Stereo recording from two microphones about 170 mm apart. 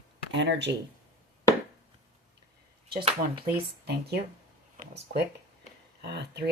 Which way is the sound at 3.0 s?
35° right (ahead or behind).